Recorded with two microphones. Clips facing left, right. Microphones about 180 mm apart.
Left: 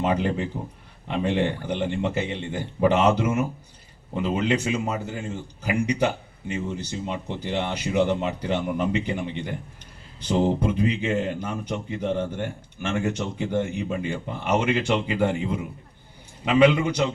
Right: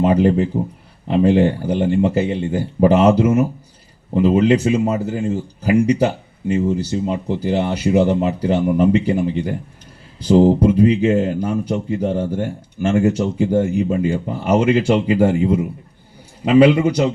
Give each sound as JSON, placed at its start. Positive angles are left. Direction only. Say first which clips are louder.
{"t": 0.0, "sound": "speech", "louder": "right 9 dB", "side_deg": -35}